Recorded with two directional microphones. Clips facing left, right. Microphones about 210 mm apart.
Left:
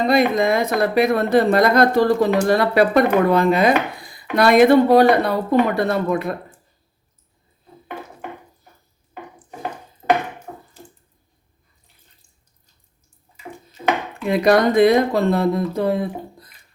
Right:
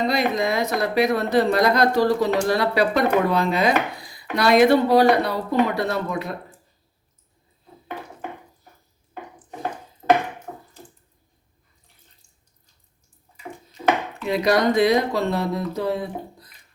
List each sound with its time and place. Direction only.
0.1 s speech: 55° left (ahead or behind)
14.3 s speech: 55° left (ahead or behind)